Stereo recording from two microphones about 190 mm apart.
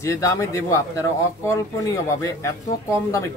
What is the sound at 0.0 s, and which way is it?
Speech, 15° left (ahead or behind).